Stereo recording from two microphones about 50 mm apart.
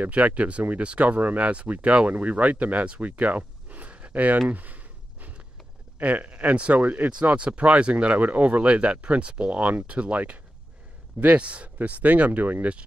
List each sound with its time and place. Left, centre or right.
0.0 s speech: right
4.5 s a sound: right
5.9 s speech: right
12.3 s speech: right